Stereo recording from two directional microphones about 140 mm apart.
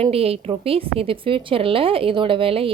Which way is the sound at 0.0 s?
45° right (ahead or behind).